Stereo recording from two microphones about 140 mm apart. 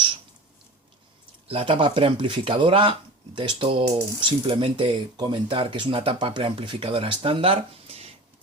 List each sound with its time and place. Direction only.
1.5 s speech: 40° right (ahead or behind)